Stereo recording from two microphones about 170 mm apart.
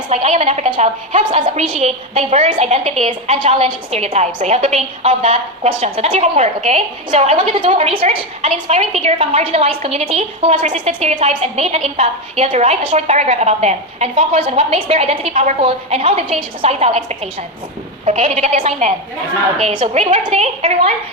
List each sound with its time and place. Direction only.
0.1 s a woman's voice: 40° right (ahead or behind)